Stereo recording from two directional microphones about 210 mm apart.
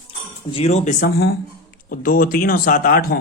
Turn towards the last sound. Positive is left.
turn(degrees=45)  # may be behind; listen again after turning